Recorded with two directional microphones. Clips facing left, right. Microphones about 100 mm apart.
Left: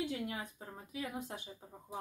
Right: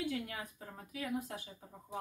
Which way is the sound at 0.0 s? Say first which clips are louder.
Even; 25° left (ahead or behind).